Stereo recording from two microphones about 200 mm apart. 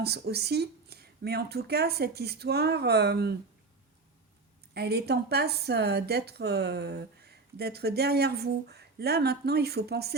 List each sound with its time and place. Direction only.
0.0 s speech: 55° right (ahead or behind)
4.7 s a woman's voice: 55° right (ahead or behind)